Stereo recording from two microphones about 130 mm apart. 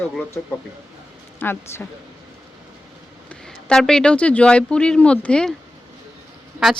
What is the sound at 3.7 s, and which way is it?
A woman's voice, 5° left (ahead or behind).